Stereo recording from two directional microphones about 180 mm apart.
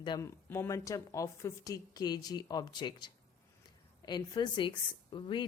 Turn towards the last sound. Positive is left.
turn(degrees=25)  # may be behind; listen again after turning